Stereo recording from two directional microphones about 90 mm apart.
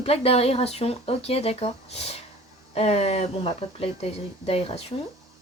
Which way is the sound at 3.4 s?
90° left.